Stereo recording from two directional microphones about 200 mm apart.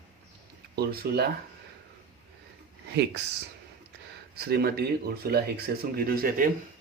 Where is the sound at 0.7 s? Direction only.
50° right (ahead or behind).